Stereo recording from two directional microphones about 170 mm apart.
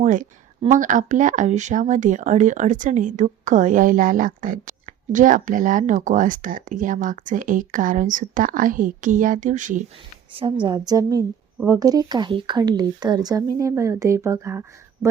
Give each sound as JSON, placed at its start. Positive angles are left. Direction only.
{"t": 0.0, "sound": "speech", "side_deg": -50}
{"t": 10.3, "sound": "a woman's voice", "side_deg": -30}